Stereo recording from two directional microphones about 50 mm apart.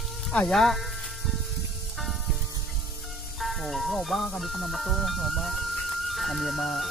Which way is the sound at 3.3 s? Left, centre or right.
Centre.